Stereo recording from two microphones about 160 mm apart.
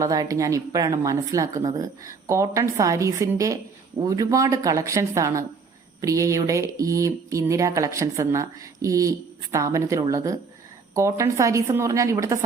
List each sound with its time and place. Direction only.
0.0 s a woman's voice: 20° right (ahead or behind)